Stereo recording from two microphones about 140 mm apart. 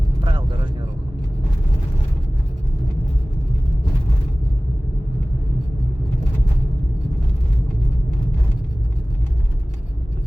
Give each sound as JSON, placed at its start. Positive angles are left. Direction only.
{"t": 0.3, "sound": "vehicle", "side_deg": -35}